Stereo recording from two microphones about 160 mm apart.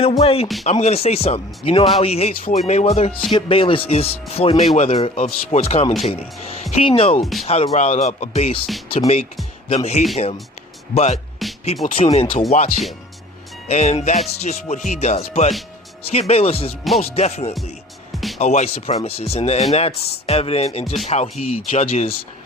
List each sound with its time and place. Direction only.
0.0 s speech: 35° left (ahead or behind)
12.5 s speech: 45° left (ahead or behind)